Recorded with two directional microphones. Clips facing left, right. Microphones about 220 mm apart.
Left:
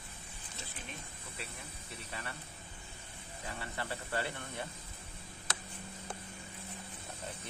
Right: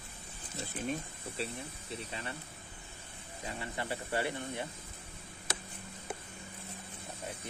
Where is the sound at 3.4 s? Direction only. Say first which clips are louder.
Right 3 dB; 20° right (ahead or behind).